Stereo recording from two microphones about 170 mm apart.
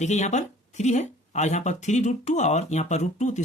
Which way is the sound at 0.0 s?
45° left (ahead or behind).